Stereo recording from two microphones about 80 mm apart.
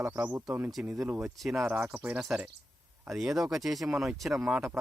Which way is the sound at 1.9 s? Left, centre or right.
Right.